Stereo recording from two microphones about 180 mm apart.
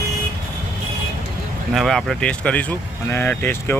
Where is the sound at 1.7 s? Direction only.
Centre (ahead or behind).